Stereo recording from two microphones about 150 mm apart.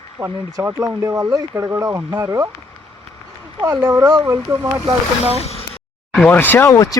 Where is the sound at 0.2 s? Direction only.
15° right (ahead or behind).